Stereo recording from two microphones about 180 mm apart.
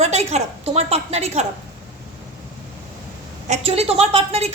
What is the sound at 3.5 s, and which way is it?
A woman's voice, 35° right (ahead or behind).